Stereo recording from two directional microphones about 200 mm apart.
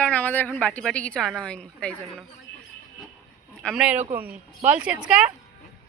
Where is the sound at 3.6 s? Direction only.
Centre (ahead or behind).